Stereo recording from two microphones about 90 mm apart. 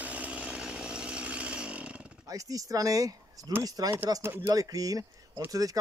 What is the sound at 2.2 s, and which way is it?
Speech, 40° right (ahead or behind).